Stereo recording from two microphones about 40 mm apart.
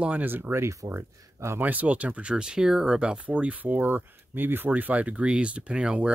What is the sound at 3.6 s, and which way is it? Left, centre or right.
Speech, right.